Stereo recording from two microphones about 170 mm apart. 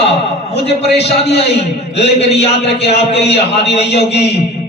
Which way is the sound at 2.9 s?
35° left (ahead or behind).